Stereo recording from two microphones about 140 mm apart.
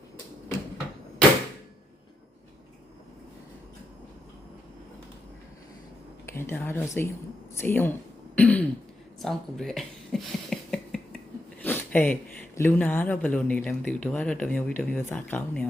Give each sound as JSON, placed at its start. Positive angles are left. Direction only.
{"t": 6.2, "sound": "speech", "side_deg": 15}
{"t": 9.2, "sound": "a sound", "side_deg": 0}
{"t": 11.6, "sound": "speech", "side_deg": 10}